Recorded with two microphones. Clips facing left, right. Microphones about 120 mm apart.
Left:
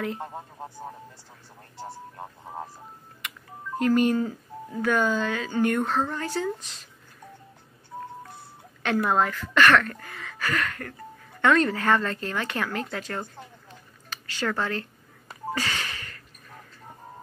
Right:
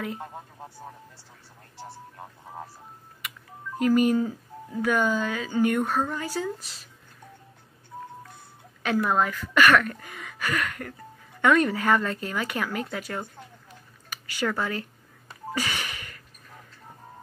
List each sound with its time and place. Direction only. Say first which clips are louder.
0.8 s speech: left 4 dB; 30° left (ahead or behind)
3.2 s telephone dialing: left 1 dB; 10° right (ahead or behind)
4.8 s speech: even; 10° right (ahead or behind)
9.1 s speech: even; 10° right (ahead or behind)
15.5 s a sound: right 1 dB; 15° right (ahead or behind)